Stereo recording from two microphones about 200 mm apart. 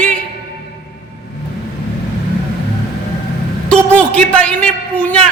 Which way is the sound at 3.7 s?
5° left (ahead or behind).